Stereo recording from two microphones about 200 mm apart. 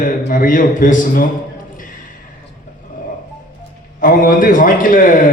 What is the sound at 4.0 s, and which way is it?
A man's voice, 45° left (ahead or behind).